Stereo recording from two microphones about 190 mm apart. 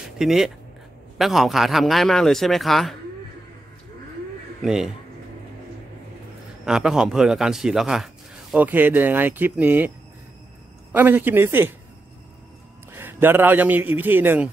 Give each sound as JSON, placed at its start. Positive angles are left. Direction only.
{"t": 0.2, "sound": "a man's voice", "side_deg": 0}
{"t": 4.6, "sound": "a man's voice", "side_deg": 0}
{"t": 6.6, "sound": "a man's voice", "side_deg": -5}
{"t": 12.9, "sound": "a man's voice", "side_deg": -10}